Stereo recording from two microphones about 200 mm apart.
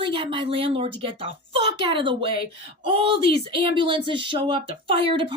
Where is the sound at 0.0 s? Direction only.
25° right (ahead or behind).